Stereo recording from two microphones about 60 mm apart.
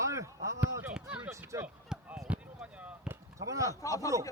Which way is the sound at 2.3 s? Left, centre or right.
Right.